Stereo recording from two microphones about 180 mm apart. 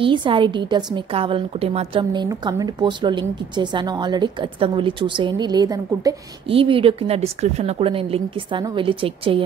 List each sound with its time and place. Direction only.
0.0 s speech: 30° right (ahead or behind)
2.2 s speech: 20° right (ahead or behind)